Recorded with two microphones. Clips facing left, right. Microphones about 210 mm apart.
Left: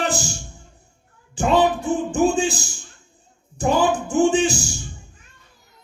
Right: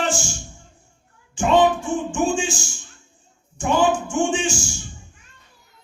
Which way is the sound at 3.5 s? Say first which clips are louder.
Even; 35° left (ahead or behind).